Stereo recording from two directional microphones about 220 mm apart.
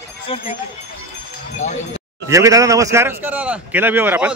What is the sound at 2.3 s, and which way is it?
A man's voice, 15° right (ahead or behind).